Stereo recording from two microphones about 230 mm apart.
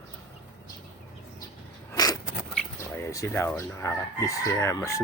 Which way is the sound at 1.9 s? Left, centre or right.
Centre.